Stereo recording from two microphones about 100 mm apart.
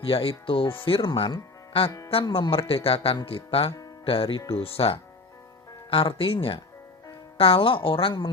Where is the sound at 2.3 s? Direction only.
65° left (ahead or behind).